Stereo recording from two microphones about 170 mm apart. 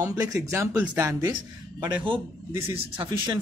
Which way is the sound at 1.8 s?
30° right (ahead or behind).